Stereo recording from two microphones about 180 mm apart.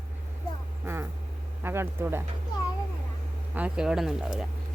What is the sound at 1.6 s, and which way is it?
Speech, 15° right (ahead or behind).